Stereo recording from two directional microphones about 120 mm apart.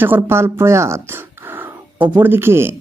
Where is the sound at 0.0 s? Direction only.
20° right (ahead or behind).